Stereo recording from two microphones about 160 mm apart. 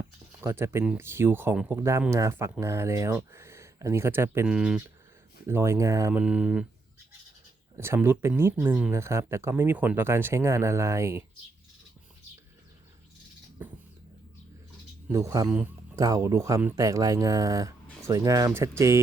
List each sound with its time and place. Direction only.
0.0 s speech: 15° right (ahead or behind)
5.5 s speech: 15° right (ahead or behind)
6.2 s speech: 5° right (ahead or behind)
7.8 s speech: 15° right (ahead or behind)
13.6 s a sound: 10° right (ahead or behind)
15.1 s speech: 20° right (ahead or behind)
15.4 s speech: 10° right (ahead or behind)
16.0 s speech: 20° right (ahead or behind)